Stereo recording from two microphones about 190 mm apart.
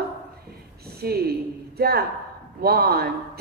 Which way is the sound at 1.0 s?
55° right (ahead or behind).